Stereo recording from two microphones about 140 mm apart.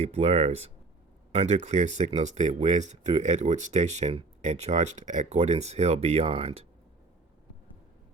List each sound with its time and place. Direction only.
0.0 s speech: 50° right (ahead or behind)